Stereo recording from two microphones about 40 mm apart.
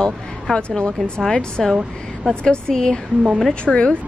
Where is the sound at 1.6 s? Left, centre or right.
Centre.